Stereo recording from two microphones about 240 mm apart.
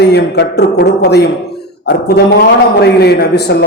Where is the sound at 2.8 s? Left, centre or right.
Left.